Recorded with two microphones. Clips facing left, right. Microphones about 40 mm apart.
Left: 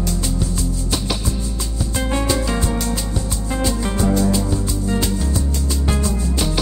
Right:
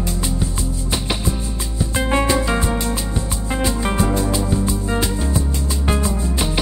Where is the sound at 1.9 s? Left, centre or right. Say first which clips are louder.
Right 3 dB; right.